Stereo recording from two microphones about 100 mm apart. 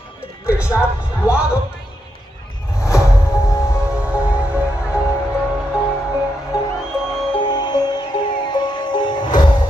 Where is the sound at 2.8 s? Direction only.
30° left (ahead or behind).